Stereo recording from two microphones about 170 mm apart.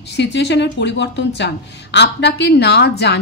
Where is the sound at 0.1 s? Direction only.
90° left.